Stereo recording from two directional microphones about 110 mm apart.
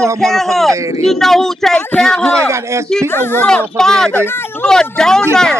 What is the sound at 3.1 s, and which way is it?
Speech, 20° left (ahead or behind).